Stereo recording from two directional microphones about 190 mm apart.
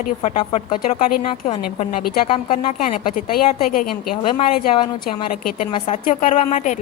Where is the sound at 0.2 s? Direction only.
30° left (ahead or behind).